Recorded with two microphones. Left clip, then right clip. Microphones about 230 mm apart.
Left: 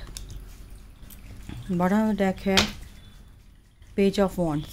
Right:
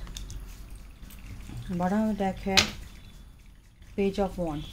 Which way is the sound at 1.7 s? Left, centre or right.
Left.